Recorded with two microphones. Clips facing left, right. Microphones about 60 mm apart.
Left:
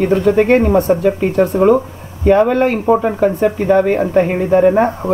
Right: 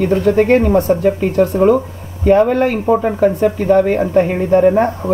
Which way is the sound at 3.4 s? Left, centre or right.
Left.